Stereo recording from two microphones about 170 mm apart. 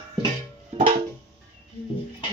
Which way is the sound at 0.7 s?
40° right (ahead or behind).